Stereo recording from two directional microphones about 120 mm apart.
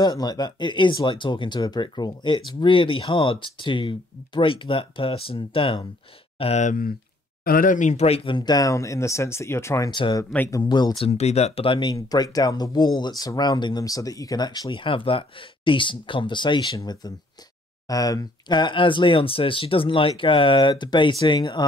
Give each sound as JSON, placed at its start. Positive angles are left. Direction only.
{"t": 0.0, "sound": "speech", "side_deg": 35}
{"t": 7.7, "sound": "speech", "side_deg": 80}
{"t": 9.8, "sound": "speech", "side_deg": 45}
{"t": 11.0, "sound": "speech", "side_deg": 60}
{"t": 11.9, "sound": "speech", "side_deg": 30}